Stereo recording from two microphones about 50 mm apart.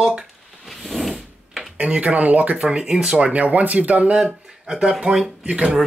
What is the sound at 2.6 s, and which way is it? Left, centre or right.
Speech, centre.